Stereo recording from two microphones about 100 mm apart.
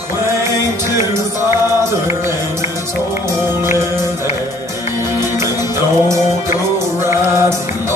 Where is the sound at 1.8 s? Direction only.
30° right (ahead or behind).